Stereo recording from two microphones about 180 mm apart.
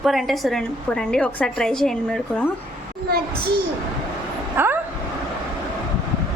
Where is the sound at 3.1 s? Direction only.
60° right (ahead or behind).